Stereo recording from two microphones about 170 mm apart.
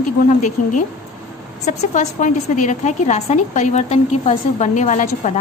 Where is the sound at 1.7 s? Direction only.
45° left (ahead or behind).